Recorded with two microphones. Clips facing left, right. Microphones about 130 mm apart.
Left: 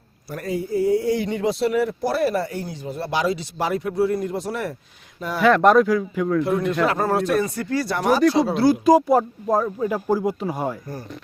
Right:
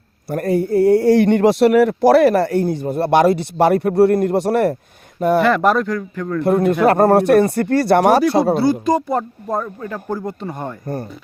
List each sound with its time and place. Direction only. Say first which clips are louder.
0.3 s a man's voice: right 8 dB; 55° right (ahead or behind)
5.4 s speech: left 4 dB; centre (ahead or behind)
6.4 s a man's voice: right 6 dB; 50° right (ahead or behind)
8.5 s speech: left 1 dB; centre (ahead or behind)